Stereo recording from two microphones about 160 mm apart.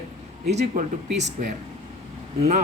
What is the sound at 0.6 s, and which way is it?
Speech, 75° right (ahead or behind).